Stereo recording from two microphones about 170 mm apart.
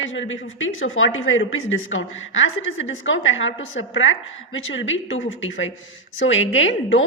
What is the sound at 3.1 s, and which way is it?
Speech, 90° left.